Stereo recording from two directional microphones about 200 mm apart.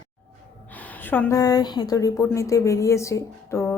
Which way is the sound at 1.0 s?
10° left (ahead or behind).